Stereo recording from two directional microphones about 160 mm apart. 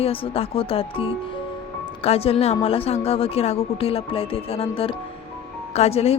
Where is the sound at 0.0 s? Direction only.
35° left (ahead or behind).